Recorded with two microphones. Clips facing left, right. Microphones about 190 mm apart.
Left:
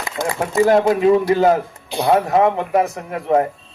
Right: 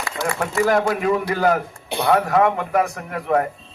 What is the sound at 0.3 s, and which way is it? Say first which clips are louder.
Speech: left 4 dB; 20° left (ahead or behind).